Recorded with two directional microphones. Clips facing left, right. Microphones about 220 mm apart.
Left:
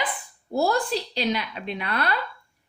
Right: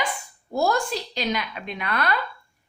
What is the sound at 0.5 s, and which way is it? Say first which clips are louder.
A woman's voice: even; 35° left (ahead or behind).